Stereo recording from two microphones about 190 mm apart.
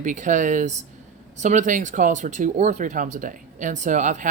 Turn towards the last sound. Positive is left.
turn(degrees=-40)  # may be behind; listen again after turning